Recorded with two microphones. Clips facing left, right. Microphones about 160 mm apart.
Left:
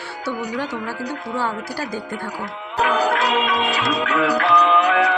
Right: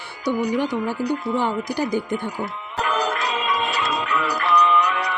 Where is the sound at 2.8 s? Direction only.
75° left (ahead or behind).